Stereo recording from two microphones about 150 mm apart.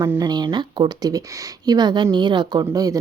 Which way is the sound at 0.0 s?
30° right (ahead or behind).